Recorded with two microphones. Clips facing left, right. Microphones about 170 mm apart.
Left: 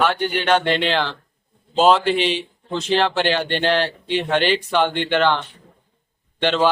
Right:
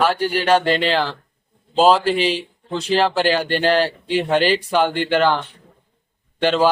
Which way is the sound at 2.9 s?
5° right (ahead or behind).